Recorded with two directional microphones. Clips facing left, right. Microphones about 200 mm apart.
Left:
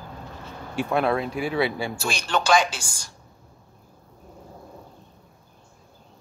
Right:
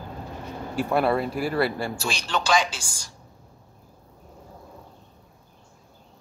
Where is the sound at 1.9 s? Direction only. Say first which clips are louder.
Left 2 dB; 50° left (ahead or behind).